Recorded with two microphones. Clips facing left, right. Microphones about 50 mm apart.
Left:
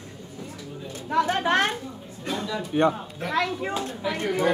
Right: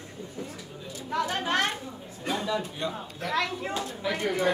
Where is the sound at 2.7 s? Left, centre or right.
Left.